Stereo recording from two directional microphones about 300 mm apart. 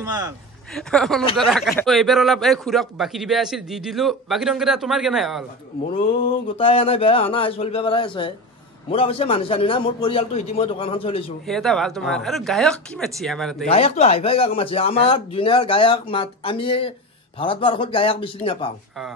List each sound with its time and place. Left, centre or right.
0.0 s speech: centre
0.7 s a man's voice: centre
6.6 s speech: centre
11.4 s a man's voice: centre
13.7 s speech: centre